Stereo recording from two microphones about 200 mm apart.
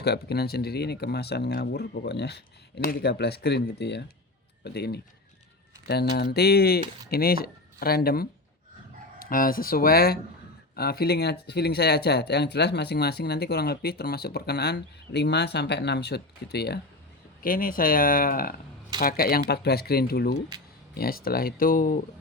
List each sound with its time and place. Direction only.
0.0 s speech: 55° left (ahead or behind)